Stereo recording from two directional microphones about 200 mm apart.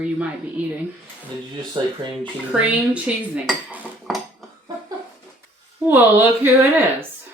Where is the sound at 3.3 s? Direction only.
5° right (ahead or behind).